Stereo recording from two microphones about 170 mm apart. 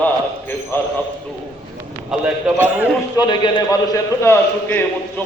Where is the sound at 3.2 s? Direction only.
25° left (ahead or behind).